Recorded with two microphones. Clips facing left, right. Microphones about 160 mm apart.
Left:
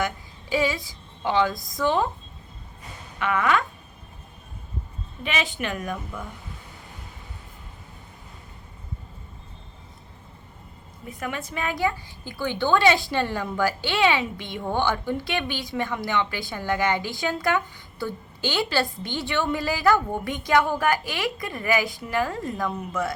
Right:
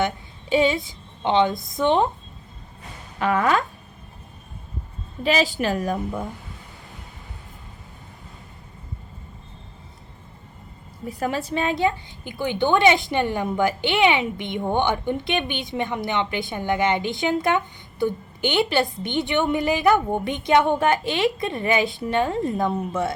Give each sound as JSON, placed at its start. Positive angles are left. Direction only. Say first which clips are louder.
{"t": 0.5, "sound": "a woman's voice", "louder": "right 5 dB", "side_deg": -25}
{"t": 3.2, "sound": "a woman's voice", "louder": "right 3 dB", "side_deg": -35}
{"t": 5.2, "sound": "a woman's voice", "louder": "right 7 dB", "side_deg": -35}
{"t": 11.1, "sound": "a woman's voice", "louder": "right 6 dB", "side_deg": -35}